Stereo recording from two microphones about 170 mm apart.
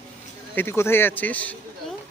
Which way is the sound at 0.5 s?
15° left (ahead or behind).